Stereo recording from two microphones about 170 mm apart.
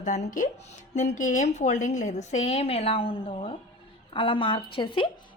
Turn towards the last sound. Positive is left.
turn(degrees=30)  # may be behind; listen again after turning